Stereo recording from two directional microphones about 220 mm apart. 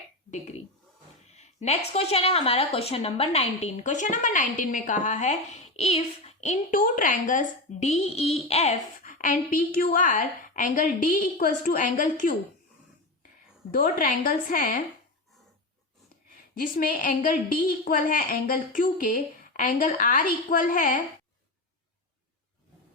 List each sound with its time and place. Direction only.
1.3 s a sound: 30° left (ahead or behind)
1.9 s a woman's voice: 25° left (ahead or behind)
13.7 s a woman's voice: 40° left (ahead or behind)
16.6 s a woman's voice: 40° left (ahead or behind)